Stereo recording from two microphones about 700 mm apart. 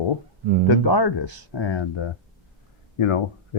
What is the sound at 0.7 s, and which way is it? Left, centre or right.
Speech, left.